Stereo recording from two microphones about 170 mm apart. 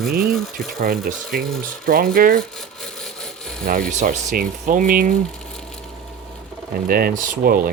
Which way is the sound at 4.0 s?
55° right (ahead or behind).